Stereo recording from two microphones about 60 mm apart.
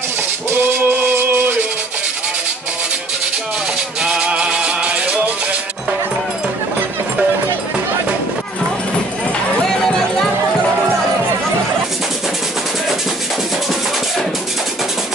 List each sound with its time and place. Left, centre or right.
0.5 s music: right
4.0 s maraca: centre